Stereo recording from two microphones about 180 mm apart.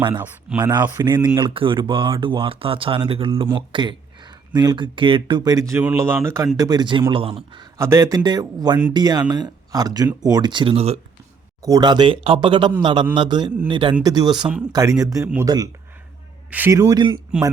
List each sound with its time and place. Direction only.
0.6 s speech: 25° right (ahead or behind)
7.8 s speech: 15° right (ahead or behind); by 11.0 s 35° right (ahead or behind)
11.6 s a man's voice: 20° right (ahead or behind)